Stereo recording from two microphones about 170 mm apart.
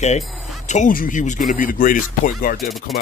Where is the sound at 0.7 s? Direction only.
45° left (ahead or behind).